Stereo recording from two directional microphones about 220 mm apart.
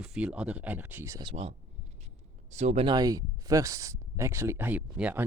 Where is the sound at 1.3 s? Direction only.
25° right (ahead or behind).